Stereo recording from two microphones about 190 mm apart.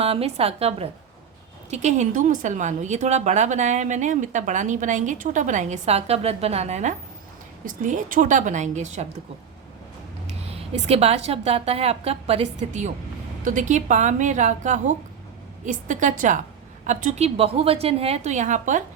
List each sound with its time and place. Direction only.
0.0 s a woman's voice: 30° right (ahead or behind)
10.2 s a woman's voice: 30° right (ahead or behind)